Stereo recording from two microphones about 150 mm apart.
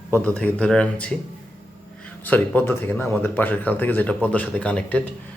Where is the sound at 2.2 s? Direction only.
10° left (ahead or behind).